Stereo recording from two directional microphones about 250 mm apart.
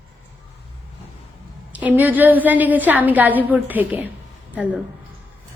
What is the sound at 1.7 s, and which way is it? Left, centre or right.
A woman's voice, centre.